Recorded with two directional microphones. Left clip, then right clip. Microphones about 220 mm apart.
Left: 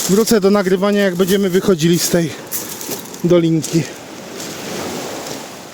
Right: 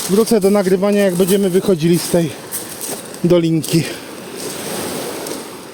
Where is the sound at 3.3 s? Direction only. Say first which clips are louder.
Even; 25° right (ahead or behind).